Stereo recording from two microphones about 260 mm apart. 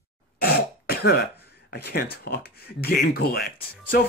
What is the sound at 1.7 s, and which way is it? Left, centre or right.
Speech, left.